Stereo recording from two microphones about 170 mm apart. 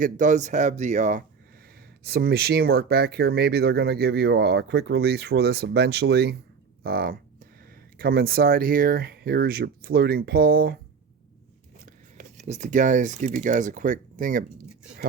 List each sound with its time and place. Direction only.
0.0 s speech: 50° right (ahead or behind)
2.0 s speech: 65° right (ahead or behind)
6.8 s speech: 60° right (ahead or behind)
12.1 s speech: 45° right (ahead or behind)